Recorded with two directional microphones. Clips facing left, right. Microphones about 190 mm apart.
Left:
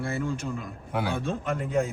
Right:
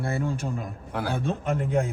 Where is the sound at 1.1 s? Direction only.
60° right (ahead or behind).